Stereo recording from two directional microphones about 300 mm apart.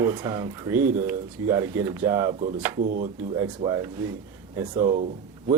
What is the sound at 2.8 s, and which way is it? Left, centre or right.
Speech, right.